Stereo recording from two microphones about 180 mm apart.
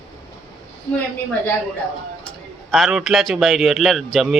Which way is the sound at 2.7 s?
Centre (ahead or behind).